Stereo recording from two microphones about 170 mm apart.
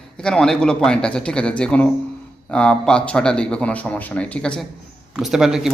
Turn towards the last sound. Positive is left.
turn(degrees=-5)  # may be behind; listen again after turning